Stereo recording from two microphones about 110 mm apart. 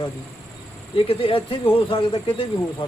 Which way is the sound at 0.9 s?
55° left (ahead or behind).